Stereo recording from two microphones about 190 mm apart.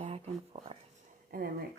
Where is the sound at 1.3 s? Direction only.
50° right (ahead or behind).